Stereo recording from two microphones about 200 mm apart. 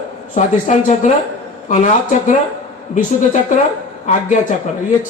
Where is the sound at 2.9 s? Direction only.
40° left (ahead or behind).